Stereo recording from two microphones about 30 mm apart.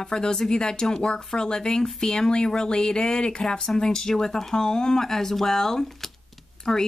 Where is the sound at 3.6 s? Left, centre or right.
Centre.